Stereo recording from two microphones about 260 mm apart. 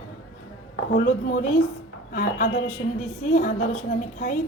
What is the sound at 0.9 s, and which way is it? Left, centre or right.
A woman's voice, left.